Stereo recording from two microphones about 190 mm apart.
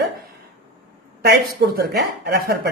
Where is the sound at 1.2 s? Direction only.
55° right (ahead or behind).